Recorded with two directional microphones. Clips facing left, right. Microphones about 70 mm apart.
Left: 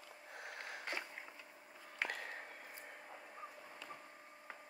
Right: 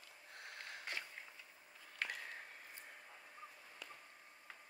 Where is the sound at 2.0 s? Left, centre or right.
Centre.